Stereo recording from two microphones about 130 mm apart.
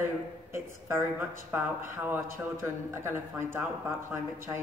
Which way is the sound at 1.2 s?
10° right (ahead or behind).